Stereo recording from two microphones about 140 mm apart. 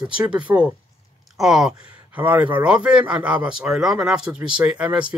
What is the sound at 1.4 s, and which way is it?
Speech, 5° right (ahead or behind).